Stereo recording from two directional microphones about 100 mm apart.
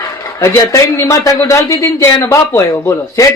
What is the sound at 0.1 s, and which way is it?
A man's voice, 30° left (ahead or behind).